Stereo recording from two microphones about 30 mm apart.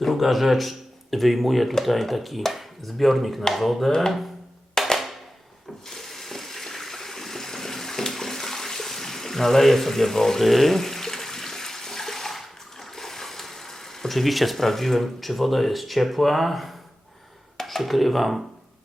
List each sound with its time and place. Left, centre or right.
0.0 s speech: centre
4.8 s music: centre
5.9 s a sound: centre
10.4 s toilet flush: centre
14.1 s speech: centre